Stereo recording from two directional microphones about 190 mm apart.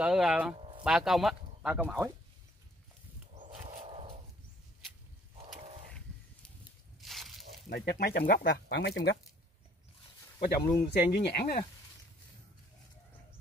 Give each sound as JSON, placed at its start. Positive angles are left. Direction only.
{"t": 0.0, "sound": "speech", "side_deg": -5}
{"t": 3.4, "sound": "a sound", "side_deg": -35}
{"t": 7.0, "sound": "a sound", "side_deg": 0}
{"t": 7.7, "sound": "speech", "side_deg": 55}
{"t": 10.6, "sound": "speech", "side_deg": 15}
{"t": 10.9, "sound": "speech", "side_deg": 50}